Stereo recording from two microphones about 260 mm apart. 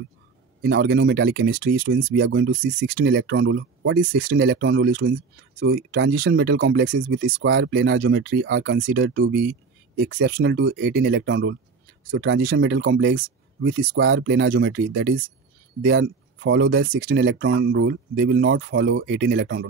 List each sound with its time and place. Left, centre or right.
0.6 s speech: right